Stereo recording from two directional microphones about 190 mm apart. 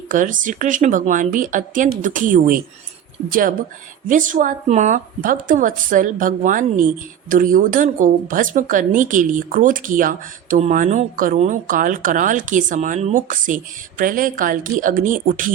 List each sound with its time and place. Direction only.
0.1 s speech: 45° right (ahead or behind)